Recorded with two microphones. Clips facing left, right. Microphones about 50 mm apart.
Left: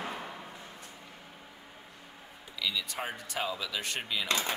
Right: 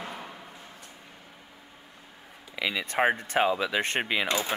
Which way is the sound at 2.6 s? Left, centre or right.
Right.